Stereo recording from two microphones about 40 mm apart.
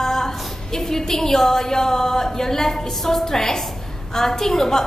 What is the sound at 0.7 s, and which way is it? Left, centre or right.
A woman's voice, centre.